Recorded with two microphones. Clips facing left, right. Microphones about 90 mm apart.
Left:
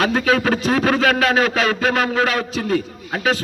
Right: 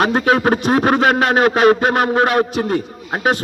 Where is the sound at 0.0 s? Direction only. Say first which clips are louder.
Right 3 dB; 20° right (ahead or behind).